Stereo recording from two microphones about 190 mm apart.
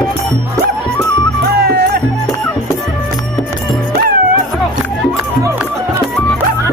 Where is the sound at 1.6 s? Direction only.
55° right (ahead or behind).